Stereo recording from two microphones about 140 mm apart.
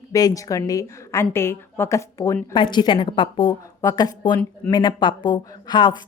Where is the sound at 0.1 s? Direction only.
25° left (ahead or behind).